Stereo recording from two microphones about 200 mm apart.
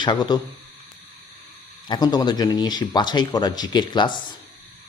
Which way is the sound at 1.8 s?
20° left (ahead or behind).